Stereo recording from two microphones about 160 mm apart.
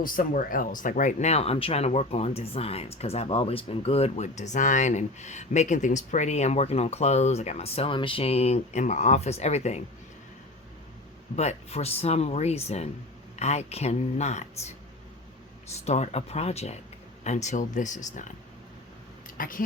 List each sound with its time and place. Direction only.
0.0 s speech: 60° left (ahead or behind); by 9.8 s 45° left (ahead or behind)
11.3 s speech: 40° left (ahead or behind)
15.9 s speech: 40° left (ahead or behind)
19.4 s speech: 60° left (ahead or behind)